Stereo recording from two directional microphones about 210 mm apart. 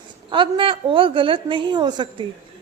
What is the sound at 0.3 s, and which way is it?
A woman's voice, 25° right (ahead or behind).